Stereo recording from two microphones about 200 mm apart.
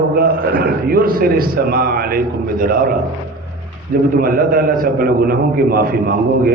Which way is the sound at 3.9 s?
45° right (ahead or behind).